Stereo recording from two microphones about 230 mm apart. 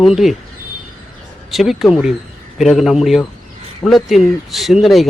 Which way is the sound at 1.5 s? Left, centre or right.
Centre.